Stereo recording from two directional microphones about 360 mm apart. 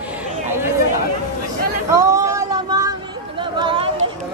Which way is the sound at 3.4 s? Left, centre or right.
Centre.